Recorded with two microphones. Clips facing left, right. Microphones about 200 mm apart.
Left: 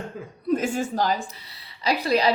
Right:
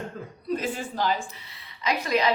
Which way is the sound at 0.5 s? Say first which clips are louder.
Left 5 dB; 45° left (ahead or behind).